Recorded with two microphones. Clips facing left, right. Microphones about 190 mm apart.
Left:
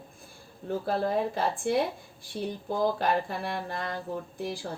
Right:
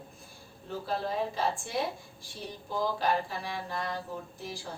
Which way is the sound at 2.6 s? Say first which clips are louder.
Left 2 dB; 55° left (ahead or behind).